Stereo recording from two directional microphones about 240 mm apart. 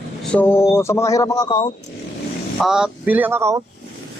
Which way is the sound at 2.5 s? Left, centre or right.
Centre.